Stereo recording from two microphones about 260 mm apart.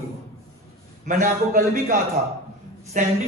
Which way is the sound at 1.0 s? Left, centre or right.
Right.